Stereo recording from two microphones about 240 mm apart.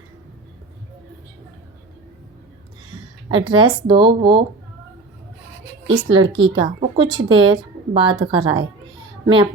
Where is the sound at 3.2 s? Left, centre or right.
Right.